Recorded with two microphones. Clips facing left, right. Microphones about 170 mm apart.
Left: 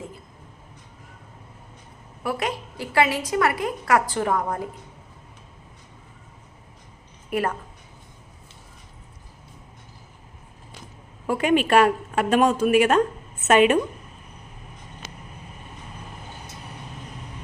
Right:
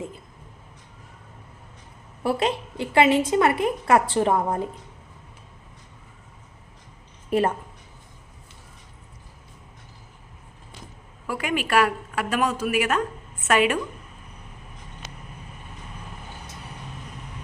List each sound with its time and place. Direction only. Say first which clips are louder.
2.2 s a woman's voice: right 3 dB; 25° right (ahead or behind)
7.3 s a woman's voice: right 3 dB; 25° right (ahead or behind)
11.3 s a woman's voice: left 6 dB; 25° left (ahead or behind)